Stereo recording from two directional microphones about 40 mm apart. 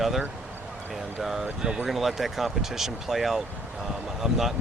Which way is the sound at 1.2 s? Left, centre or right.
Centre.